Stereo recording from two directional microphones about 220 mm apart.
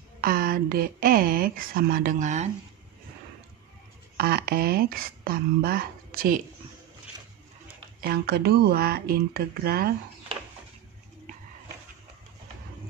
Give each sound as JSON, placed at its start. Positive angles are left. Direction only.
{"t": 0.2, "sound": "speech", "side_deg": -40}
{"t": 4.2, "sound": "speech", "side_deg": -45}
{"t": 8.0, "sound": "speech", "side_deg": -45}